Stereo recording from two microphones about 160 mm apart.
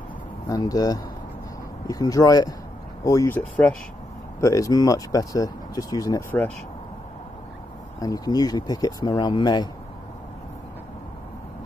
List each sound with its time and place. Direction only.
0.5 s speech: 20° left (ahead or behind)
8.0 s speech: 25° left (ahead or behind)